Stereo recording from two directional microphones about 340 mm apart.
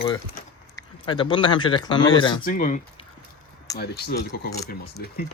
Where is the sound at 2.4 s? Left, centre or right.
Left.